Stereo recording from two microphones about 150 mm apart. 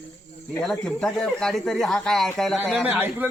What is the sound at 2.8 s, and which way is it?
Speech, 10° right (ahead or behind).